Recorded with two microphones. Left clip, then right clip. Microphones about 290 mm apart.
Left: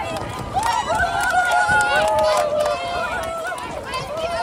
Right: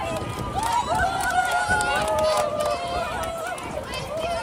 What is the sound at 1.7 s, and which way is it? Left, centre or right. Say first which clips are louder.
Run: left 5 dB; left.